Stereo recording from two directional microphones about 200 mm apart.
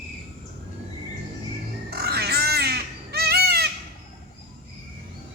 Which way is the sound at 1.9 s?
50° right (ahead or behind).